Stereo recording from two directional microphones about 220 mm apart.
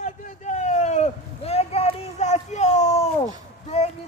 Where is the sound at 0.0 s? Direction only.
30° left (ahead or behind).